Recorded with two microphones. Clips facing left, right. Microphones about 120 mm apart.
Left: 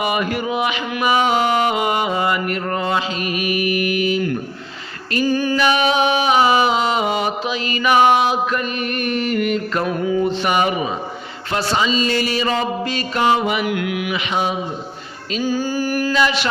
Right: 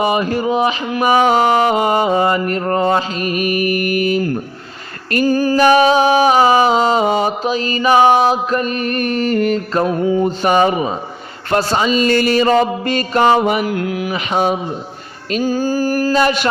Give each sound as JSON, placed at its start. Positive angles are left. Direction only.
{"t": 0.0, "sound": "music", "side_deg": -30}
{"t": 11.5, "sound": "music", "side_deg": -45}